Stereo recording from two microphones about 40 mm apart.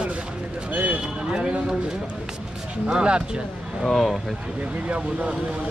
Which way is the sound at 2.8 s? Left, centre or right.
Right.